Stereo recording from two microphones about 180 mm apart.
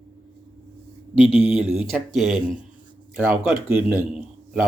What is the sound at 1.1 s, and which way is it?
Speech, 10° right (ahead or behind).